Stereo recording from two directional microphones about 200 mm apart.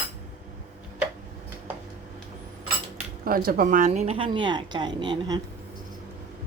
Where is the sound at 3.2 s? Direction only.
45° right (ahead or behind); by 5.4 s 25° right (ahead or behind).